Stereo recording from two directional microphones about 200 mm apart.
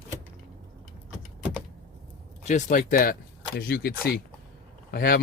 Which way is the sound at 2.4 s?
35° left (ahead or behind).